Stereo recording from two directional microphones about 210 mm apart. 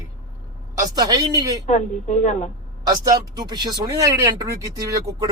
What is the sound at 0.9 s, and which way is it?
Speech, 15° right (ahead or behind).